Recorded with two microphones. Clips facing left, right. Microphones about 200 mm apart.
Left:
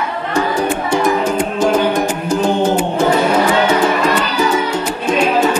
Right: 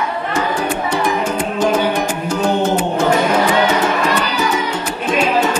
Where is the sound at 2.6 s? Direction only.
10° left (ahead or behind).